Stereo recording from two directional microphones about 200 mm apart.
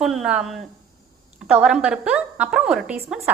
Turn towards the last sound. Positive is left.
turn(degrees=-5)  # may be behind; listen again after turning